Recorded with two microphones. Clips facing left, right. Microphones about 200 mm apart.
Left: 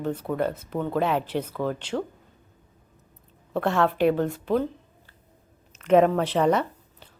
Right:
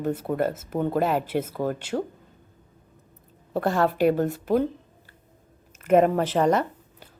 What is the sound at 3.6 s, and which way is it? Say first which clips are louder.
Speech: even; 5° right (ahead or behind).